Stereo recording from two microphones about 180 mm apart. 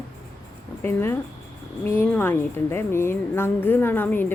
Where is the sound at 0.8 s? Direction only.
15° left (ahead or behind).